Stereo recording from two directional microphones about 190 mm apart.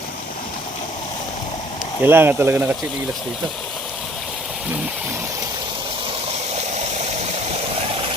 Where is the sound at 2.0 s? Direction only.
10° right (ahead or behind).